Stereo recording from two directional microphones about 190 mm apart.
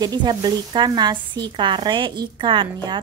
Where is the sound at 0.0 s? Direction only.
20° right (ahead or behind).